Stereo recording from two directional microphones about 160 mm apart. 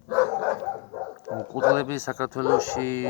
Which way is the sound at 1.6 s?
15° right (ahead or behind).